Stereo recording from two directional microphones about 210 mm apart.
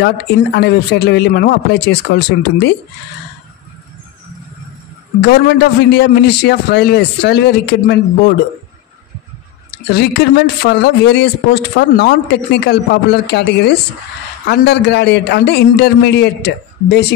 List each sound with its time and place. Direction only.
0.0 s speech: 50° left (ahead or behind)
5.2 s speech: 50° left (ahead or behind)
9.9 s speech: 50° left (ahead or behind)